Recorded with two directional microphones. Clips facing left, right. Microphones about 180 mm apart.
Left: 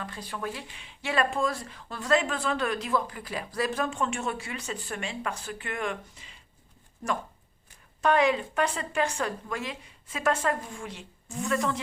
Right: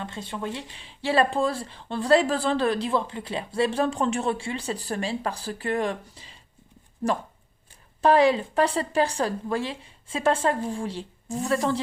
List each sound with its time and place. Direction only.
0.0 s speech: 25° right (ahead or behind)
7.7 s speech: 30° right (ahead or behind)